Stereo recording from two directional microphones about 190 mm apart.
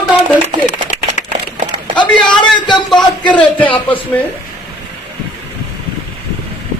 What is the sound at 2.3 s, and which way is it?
Speech, 25° left (ahead or behind).